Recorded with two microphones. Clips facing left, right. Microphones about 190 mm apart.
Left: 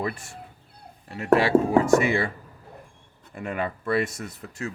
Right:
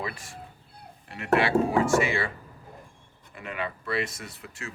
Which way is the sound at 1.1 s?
35° left (ahead or behind).